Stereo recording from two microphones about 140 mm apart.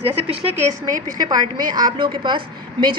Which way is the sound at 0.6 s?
25° right (ahead or behind).